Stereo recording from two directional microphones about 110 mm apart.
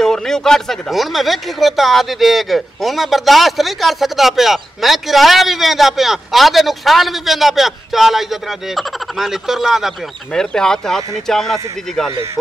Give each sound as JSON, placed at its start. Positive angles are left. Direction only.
{"t": 0.0, "sound": "speech", "side_deg": 5}